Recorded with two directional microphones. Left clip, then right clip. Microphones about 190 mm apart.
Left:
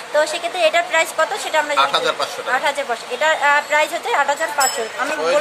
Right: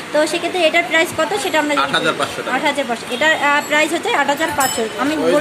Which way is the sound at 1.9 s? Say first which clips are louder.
Right 1 dB; 25° left (ahead or behind).